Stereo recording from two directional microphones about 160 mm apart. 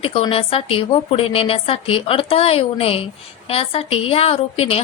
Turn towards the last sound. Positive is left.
turn(degrees=35)  # may be behind; listen again after turning